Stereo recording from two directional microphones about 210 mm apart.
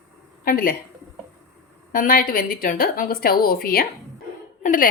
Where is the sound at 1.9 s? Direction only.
40° left (ahead or behind).